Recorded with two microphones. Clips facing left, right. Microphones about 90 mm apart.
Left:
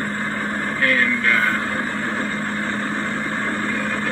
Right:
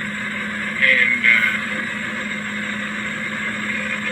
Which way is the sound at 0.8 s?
30° left (ahead or behind).